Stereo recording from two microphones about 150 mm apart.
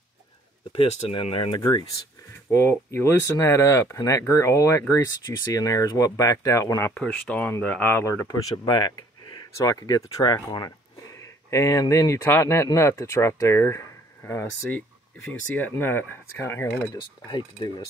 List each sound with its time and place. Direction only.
0.7 s speech: 40° left (ahead or behind)
2.5 s speech: 15° left (ahead or behind)
6.9 s speech: 5° left (ahead or behind)
16.9 s speech: 30° left (ahead or behind)